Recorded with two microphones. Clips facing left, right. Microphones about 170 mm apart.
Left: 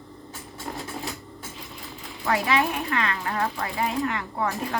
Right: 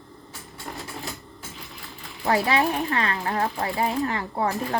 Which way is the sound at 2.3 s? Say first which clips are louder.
Right 2 dB; 35° right (ahead or behind).